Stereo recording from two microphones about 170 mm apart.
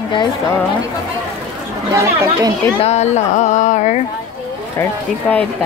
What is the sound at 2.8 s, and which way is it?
Speech, 40° left (ahead or behind).